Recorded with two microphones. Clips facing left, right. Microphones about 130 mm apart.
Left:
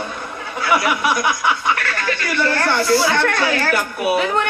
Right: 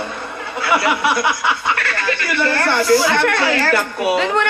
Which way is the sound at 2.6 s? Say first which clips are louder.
Right 3 dB; 20° right (ahead or behind).